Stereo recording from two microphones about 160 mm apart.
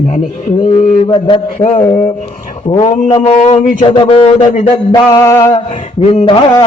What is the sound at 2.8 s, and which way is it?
A man's voice, 40° left (ahead or behind).